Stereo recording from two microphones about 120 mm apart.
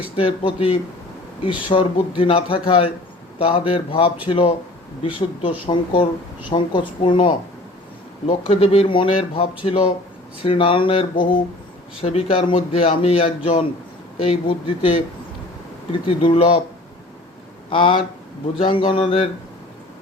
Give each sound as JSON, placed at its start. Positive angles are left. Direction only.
{"t": 0.2, "sound": "a man's voice", "side_deg": 50}
{"t": 8.4, "sound": "a man's voice", "side_deg": 55}
{"t": 17.7, "sound": "a man's voice", "side_deg": 45}